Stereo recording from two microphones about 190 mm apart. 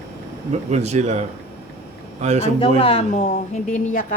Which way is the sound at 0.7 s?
35° right (ahead or behind).